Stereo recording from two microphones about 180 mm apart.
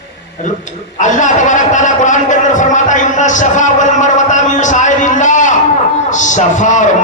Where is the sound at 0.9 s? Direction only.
45° left (ahead or behind).